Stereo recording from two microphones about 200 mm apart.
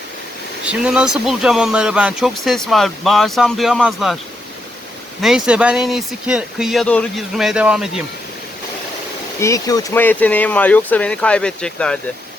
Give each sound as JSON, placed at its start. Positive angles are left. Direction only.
{"t": 0.6, "sound": "speech", "side_deg": -5}
{"t": 5.2, "sound": "speech", "side_deg": -5}
{"t": 9.4, "sound": "speech", "side_deg": 15}